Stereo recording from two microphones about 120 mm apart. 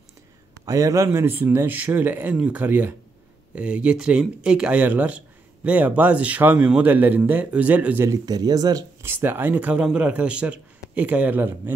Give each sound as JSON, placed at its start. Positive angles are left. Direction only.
{"t": 0.7, "sound": "speech", "side_deg": -25}
{"t": 8.1, "sound": "speech", "side_deg": -35}
{"t": 9.0, "sound": "speech", "side_deg": -20}